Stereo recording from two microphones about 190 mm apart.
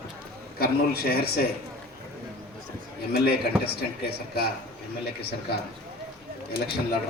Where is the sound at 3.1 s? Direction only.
55° left (ahead or behind).